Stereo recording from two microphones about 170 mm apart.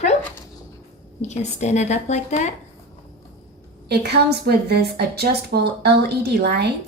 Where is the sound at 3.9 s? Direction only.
75° right (ahead or behind).